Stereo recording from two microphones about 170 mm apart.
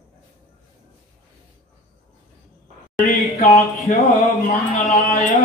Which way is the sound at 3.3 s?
40° left (ahead or behind).